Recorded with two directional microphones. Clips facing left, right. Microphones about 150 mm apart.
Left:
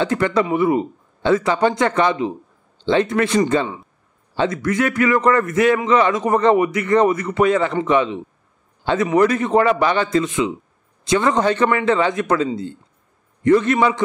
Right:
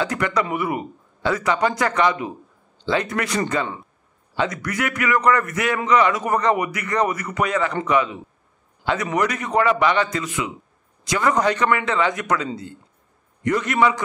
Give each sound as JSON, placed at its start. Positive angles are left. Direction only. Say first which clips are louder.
{"t": 0.0, "sound": "a man's voice", "louder": "left 4 dB", "side_deg": 25}
{"t": 4.4, "sound": "a man's voice", "louder": "left 5 dB", "side_deg": 25}